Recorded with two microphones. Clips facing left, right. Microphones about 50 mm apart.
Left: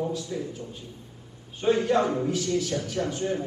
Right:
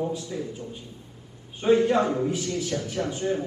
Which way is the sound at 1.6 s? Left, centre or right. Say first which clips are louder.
Right 2 dB; right.